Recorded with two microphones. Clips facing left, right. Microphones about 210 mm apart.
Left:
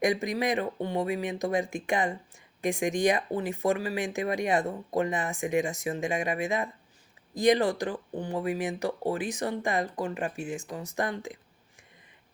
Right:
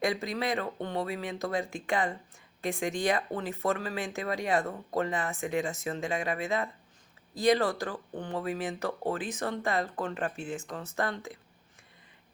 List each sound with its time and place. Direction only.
0.0 s speech: 15° left (ahead or behind)